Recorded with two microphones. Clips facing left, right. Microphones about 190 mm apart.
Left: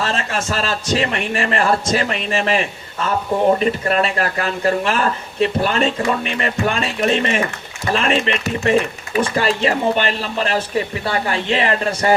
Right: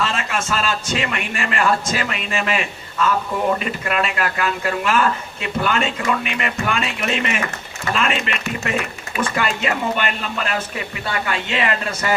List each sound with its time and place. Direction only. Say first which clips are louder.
0.1 s speech: left 2 dB; 35° left (ahead or behind)